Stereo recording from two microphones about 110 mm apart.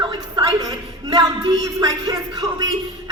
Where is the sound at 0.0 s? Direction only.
40° right (ahead or behind).